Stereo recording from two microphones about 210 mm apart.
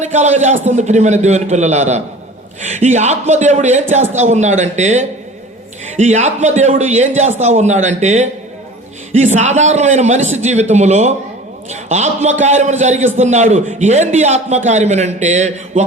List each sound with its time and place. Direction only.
0.0 s a man's voice: 35° right (ahead or behind)